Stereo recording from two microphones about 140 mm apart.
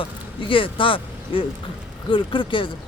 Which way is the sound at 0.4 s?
40° left (ahead or behind).